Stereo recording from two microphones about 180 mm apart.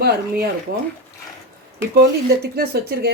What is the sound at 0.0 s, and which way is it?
Speech, 65° right (ahead or behind).